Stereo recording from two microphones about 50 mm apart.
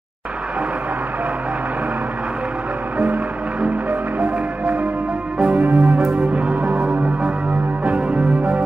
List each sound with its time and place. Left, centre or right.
5.4 s music: right